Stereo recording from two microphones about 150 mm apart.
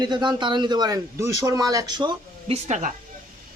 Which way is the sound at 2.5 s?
50° right (ahead or behind).